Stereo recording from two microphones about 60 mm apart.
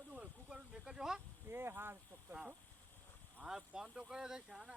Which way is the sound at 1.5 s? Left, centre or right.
Right.